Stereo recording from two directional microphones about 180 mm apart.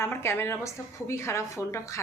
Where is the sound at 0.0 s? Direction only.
15° left (ahead or behind).